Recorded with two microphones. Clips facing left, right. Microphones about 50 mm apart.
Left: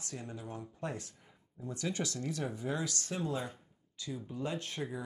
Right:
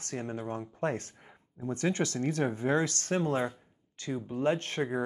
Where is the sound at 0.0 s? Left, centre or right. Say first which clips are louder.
Right 8 dB; right.